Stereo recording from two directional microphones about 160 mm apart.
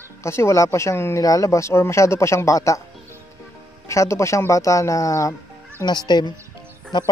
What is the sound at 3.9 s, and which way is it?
Speech, 15° left (ahead or behind).